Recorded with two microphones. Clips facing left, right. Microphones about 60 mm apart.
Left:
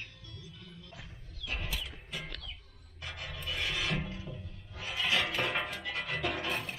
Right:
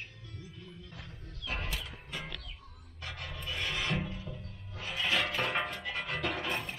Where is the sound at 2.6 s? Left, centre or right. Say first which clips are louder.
Right 6 dB; right.